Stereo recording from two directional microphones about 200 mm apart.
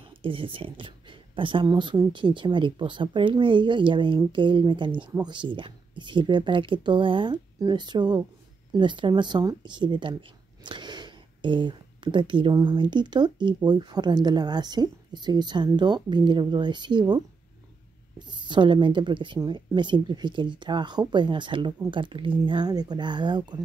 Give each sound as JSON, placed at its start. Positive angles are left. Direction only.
{"t": 0.0, "sound": "speech", "side_deg": -25}
{"t": 18.2, "sound": "speech", "side_deg": -20}